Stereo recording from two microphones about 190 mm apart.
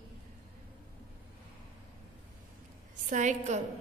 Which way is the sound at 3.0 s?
40° right (ahead or behind).